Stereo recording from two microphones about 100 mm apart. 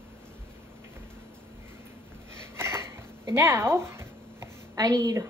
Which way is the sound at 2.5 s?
25° right (ahead or behind).